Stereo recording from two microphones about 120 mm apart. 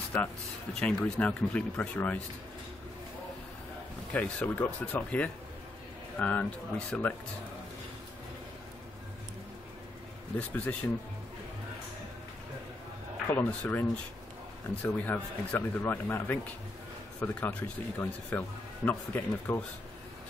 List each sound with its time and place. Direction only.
0.1 s speech: 10° left (ahead or behind)
4.1 s speech: 10° left (ahead or behind)
10.5 s speech: 15° left (ahead or behind)
13.3 s speech: 15° left (ahead or behind)